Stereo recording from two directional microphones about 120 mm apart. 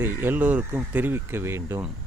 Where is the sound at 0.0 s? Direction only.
15° right (ahead or behind).